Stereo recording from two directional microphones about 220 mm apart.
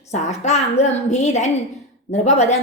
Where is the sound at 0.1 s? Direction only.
30° left (ahead or behind).